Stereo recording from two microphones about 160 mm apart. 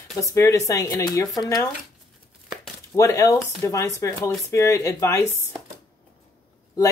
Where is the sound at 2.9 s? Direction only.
20° left (ahead or behind).